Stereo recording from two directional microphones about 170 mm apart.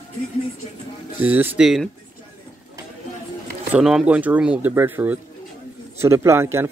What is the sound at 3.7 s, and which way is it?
Speech, 5° right (ahead or behind).